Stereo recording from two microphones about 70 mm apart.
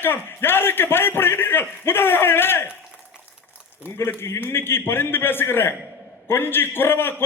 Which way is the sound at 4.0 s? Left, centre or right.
Left.